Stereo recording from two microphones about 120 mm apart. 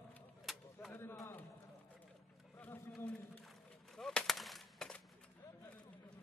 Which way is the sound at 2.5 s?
10° left (ahead or behind).